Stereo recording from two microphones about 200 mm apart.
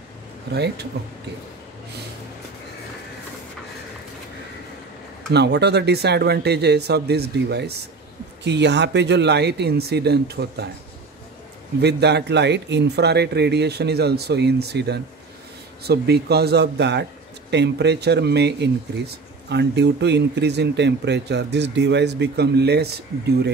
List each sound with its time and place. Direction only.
1.0 s speech: 55° right (ahead or behind)
5.3 s speech: 55° right (ahead or behind)
11.8 s speech: 55° right (ahead or behind)